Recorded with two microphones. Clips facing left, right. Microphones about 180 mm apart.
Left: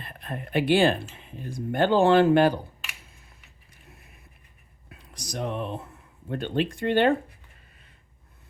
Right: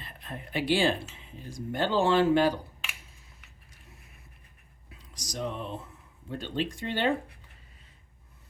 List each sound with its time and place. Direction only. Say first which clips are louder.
0.0 s speech: left 5 dB; 55° left (ahead or behind)
4.9 s speech: left 5 dB; 60° left (ahead or behind)